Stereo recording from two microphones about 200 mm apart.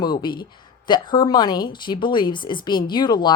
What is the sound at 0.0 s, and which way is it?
Speech, 20° left (ahead or behind).